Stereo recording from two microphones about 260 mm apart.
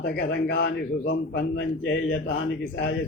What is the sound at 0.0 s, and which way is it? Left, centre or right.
A man's voice, left.